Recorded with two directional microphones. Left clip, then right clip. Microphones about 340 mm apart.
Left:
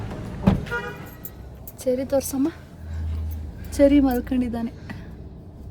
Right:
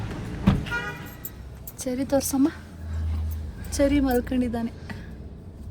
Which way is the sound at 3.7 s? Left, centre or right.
Centre.